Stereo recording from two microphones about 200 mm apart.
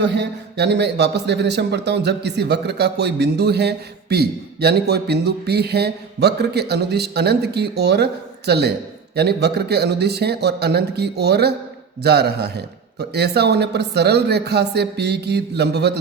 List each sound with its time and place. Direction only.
0.0 s speech: 60° right (ahead or behind)